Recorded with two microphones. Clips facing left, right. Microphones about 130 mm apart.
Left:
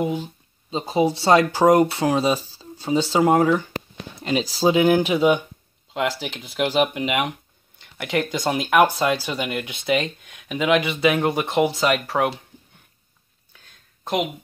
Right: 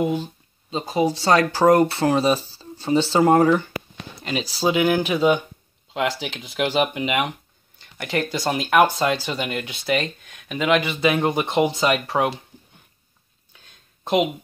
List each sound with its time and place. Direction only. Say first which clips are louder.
0.0 s speech: right 2 dB; 5° left (ahead or behind)
0.7 s speech: left 1 dB; 20° left (ahead or behind); by 3.6 s 5° left (ahead or behind)
4.2 s speech: left 3 dB; 20° left (ahead or behind)
5.9 s speech: even; centre (ahead or behind)